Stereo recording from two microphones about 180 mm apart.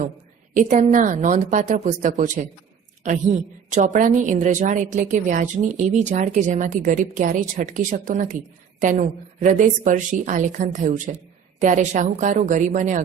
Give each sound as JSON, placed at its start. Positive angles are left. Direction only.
{"t": 0.5, "sound": "a woman's voice", "side_deg": -45}
{"t": 3.7, "sound": "a woman's voice", "side_deg": -45}